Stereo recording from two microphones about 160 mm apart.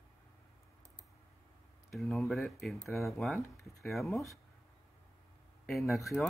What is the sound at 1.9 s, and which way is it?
Speech, centre (ahead or behind).